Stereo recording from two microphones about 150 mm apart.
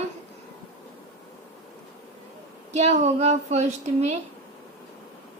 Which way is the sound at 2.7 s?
50° right (ahead or behind).